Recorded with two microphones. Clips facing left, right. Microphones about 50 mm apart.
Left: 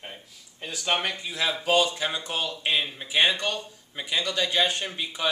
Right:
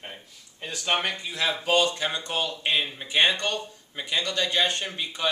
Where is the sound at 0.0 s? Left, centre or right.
Centre.